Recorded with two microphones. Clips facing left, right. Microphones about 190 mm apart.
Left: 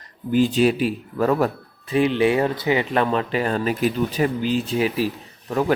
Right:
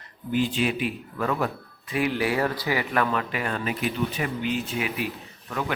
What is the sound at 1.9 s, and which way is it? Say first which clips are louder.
Speech: left 7 dB; 25° left (ahead or behind).